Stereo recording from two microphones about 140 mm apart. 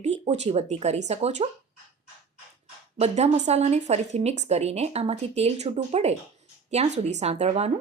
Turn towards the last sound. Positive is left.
turn(degrees=-50)  # may be behind; listen again after turning